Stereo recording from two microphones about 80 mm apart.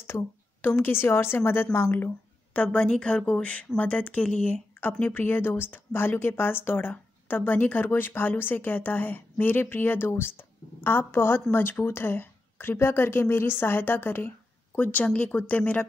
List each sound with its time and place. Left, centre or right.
0.0 s a woman's voice: left